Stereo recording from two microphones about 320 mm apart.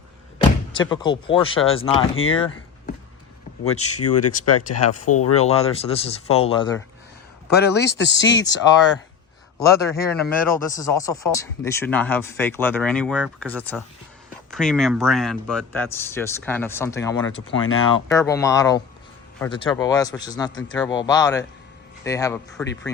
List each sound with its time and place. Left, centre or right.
0.7 s speech: centre
3.6 s speech: left
5.4 s speech: centre
7.5 s speech: left
9.6 s speech: centre